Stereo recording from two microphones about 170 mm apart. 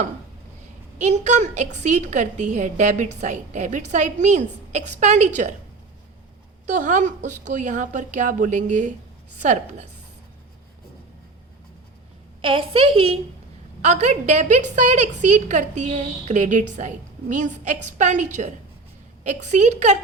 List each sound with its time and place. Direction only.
0.9 s a woman's voice: 45° right (ahead or behind)
6.7 s a woman's voice: 45° right (ahead or behind)
12.4 s a woman's voice: 30° right (ahead or behind)